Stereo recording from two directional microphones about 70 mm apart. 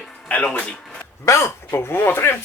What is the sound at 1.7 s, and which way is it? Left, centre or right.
Speech, left.